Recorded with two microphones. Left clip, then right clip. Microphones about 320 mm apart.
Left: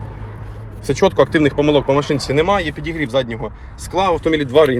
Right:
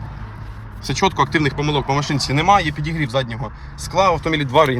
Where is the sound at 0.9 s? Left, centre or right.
Centre.